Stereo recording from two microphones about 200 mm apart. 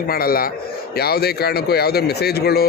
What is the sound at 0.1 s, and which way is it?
Speech, 50° left (ahead or behind).